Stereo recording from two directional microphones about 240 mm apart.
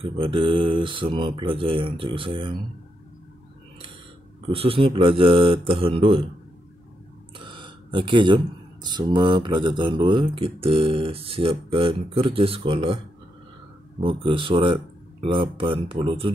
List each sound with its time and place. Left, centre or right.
0.0 s speech: right
4.5 s speech: right
7.3 s a sound: centre
8.8 s speech: centre
14.0 s speech: right